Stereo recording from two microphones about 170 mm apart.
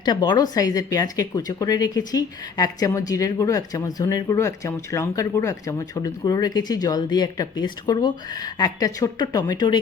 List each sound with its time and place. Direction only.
0.0 s speech: 25° left (ahead or behind)